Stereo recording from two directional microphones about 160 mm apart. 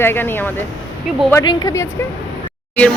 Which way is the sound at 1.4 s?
25° left (ahead or behind).